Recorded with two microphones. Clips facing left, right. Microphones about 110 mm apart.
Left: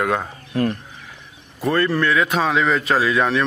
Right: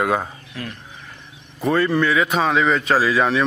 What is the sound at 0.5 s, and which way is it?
Speech, 45° left (ahead or behind).